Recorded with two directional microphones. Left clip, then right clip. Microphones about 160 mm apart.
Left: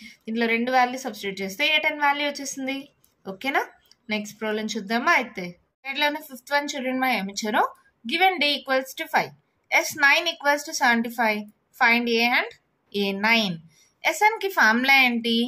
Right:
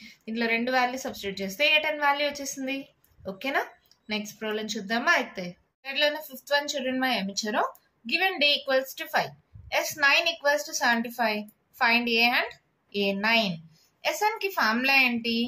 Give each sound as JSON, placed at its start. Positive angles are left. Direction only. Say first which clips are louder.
{"t": 0.0, "sound": "a woman's voice", "louder": "left 4 dB", "side_deg": 35}